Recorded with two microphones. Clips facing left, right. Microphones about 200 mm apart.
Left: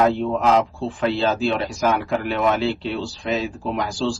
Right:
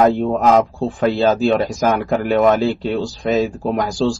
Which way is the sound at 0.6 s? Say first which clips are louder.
Right 5 dB; 45° right (ahead or behind).